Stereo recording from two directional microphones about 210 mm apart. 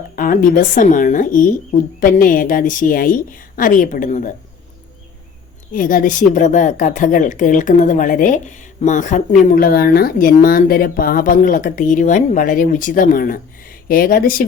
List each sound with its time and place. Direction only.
0.2 s a woman's voice: 40° left (ahead or behind)
5.7 s a woman's voice: 40° left (ahead or behind)